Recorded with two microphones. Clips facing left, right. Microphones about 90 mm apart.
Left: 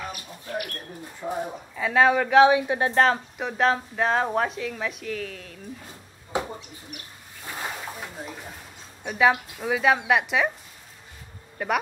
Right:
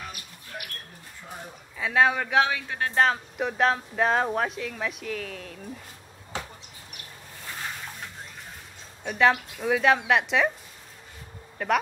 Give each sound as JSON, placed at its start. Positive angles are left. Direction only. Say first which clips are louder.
{"t": 1.2, "sound": "speech", "louder": "left 12 dB", "side_deg": 25}
{"t": 1.8, "sound": "speech", "louder": "left 3 dB", "side_deg": 0}
{"t": 2.4, "sound": "speech", "louder": "left 10 dB", "side_deg": 20}
{"t": 2.9, "sound": "speech", "louder": "even", "side_deg": 0}
{"t": 6.3, "sound": "a sound", "louder": "left 8 dB", "side_deg": 15}
{"t": 8.2, "sound": "a sound", "louder": "left 6 dB", "side_deg": 5}
{"t": 9.0, "sound": "speech", "louder": "left 1 dB", "side_deg": 5}
{"t": 11.5, "sound": "speech", "louder": "right 1 dB", "side_deg": 5}